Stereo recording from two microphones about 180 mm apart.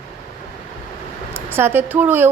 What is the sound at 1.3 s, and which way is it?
Speech, 10° right (ahead or behind).